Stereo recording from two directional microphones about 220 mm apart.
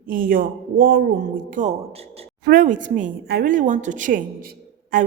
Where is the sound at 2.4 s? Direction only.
40° right (ahead or behind).